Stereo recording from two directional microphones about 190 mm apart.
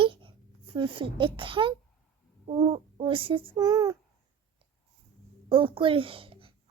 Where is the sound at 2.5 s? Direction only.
30° right (ahead or behind).